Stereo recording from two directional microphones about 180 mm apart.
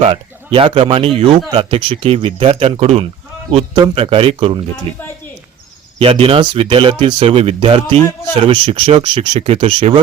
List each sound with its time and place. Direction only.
0.0 s speech: 30° right (ahead or behind)
6.0 s speech: 30° right (ahead or behind)